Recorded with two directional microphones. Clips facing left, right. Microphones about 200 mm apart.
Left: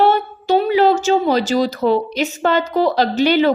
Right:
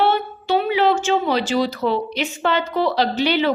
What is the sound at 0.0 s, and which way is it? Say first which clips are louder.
Speech: left 4 dB; 40° left (ahead or behind).